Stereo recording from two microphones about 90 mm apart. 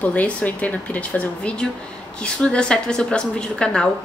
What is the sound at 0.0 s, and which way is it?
Speech, 15° left (ahead or behind).